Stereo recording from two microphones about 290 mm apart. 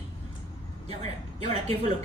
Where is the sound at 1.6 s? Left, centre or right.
Right.